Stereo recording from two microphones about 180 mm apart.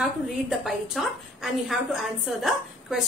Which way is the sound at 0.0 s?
Centre (ahead or behind).